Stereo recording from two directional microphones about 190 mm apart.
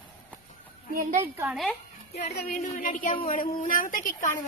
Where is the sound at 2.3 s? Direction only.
55° left (ahead or behind).